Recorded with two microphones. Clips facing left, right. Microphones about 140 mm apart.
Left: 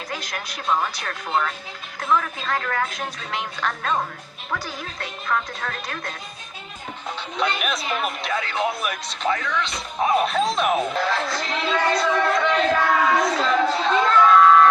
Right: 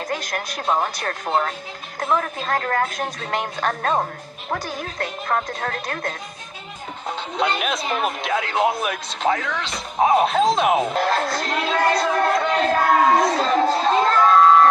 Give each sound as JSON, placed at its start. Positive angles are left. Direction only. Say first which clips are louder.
{"t": 0.1, "sound": "a woman's voice", "louder": "right 5 dB", "side_deg": -45}
{"t": 7.3, "sound": "speech", "louder": "right 2 dB", "side_deg": -30}
{"t": 8.0, "sound": "a woman's voice", "louder": "right 3 dB", "side_deg": -45}
{"t": 8.5, "sound": "speech", "louder": "right 4 dB", "side_deg": -25}
{"t": 9.3, "sound": "a woman's voice", "louder": "even", "side_deg": -45}
{"t": 10.0, "sound": "speech", "louder": "right 4 dB", "side_deg": -25}
{"t": 10.9, "sound": "speech", "louder": "right 3 dB", "side_deg": -45}